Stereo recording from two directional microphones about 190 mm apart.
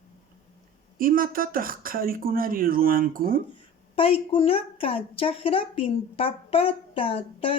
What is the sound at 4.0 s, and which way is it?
A woman's voice, 30° left (ahead or behind).